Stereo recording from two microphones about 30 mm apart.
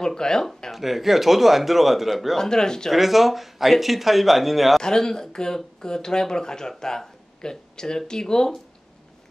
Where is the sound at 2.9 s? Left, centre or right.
Centre.